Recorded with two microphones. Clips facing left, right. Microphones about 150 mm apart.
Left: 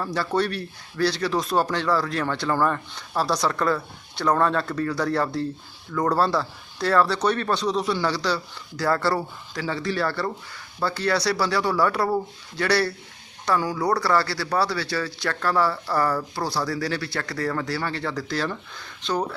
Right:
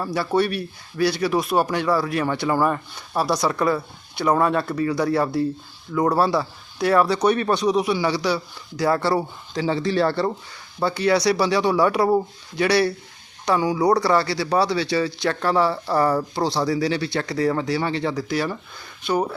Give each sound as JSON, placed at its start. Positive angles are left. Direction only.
{"t": 0.0, "sound": "speech", "side_deg": -10}